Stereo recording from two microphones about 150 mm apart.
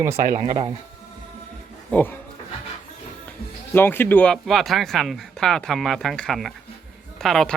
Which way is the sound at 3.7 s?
15° left (ahead or behind).